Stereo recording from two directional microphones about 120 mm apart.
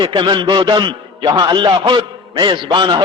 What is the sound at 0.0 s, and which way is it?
A man's voice, 40° right (ahead or behind).